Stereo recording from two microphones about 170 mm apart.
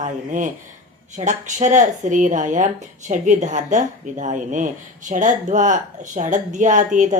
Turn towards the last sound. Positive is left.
turn(degrees=-50)  # may be behind; listen again after turning